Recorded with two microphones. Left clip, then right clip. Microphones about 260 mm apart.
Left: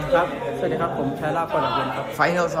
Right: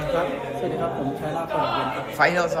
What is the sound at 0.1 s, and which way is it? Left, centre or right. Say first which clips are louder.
A man's voice: left 5 dB; centre.